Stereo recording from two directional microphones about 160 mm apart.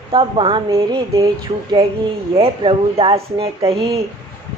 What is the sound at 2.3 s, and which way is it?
A woman's voice, 35° right (ahead or behind).